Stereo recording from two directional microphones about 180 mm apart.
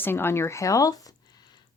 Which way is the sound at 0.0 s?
10° left (ahead or behind).